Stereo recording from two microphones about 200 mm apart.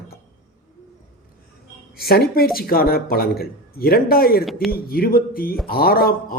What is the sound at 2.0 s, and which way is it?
A man's voice, 50° left (ahead or behind).